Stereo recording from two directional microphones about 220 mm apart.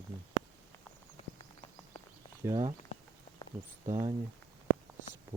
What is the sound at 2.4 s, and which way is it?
Speech, 15° right (ahead or behind).